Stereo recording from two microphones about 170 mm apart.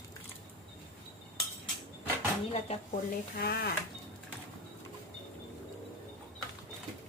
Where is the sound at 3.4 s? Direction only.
65° left (ahead or behind).